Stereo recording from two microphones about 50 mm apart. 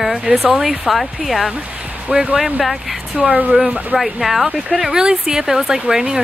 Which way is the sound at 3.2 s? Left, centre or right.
Right.